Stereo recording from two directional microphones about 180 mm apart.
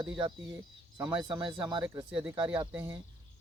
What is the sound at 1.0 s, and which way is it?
Speech, 25° right (ahead or behind).